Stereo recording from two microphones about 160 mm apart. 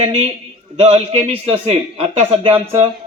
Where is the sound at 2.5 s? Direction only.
15° right (ahead or behind).